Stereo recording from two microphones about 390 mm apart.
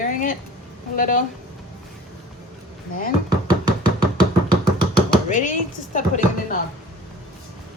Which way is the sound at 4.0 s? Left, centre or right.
Left.